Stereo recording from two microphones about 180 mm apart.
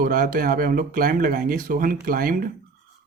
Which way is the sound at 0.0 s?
50° right (ahead or behind).